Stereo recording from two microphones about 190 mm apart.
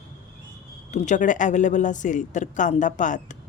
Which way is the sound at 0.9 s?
40° left (ahead or behind).